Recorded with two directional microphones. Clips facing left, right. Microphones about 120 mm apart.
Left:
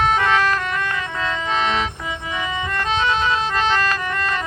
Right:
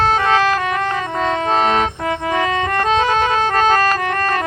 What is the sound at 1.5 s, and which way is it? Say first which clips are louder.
Organ: right 5 dB; 45° right (ahead or behind).